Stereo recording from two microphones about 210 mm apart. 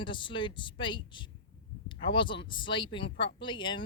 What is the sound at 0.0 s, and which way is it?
Speech, 25° left (ahead or behind).